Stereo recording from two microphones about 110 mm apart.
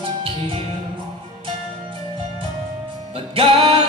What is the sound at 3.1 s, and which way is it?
Music, 55° right (ahead or behind).